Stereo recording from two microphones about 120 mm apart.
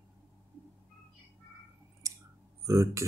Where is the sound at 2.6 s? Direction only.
25° right (ahead or behind).